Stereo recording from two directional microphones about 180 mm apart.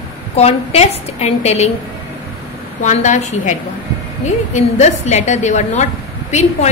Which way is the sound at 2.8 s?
40° left (ahead or behind).